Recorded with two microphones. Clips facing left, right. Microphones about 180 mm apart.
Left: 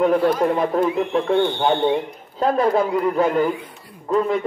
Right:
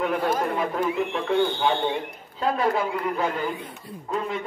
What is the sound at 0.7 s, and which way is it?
A man's voice, 35° left (ahead or behind).